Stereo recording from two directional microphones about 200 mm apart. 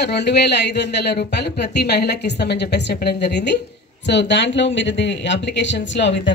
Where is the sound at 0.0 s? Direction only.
55° left (ahead or behind).